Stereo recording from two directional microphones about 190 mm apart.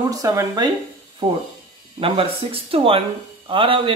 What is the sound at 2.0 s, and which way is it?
Speech, 30° right (ahead or behind).